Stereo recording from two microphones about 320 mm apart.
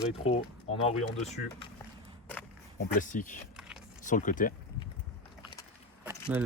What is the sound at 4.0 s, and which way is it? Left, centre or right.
Speech, left.